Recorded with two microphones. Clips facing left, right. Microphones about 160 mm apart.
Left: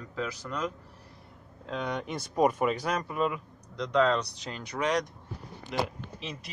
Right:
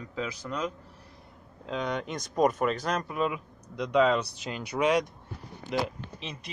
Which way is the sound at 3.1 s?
Centre (ahead or behind).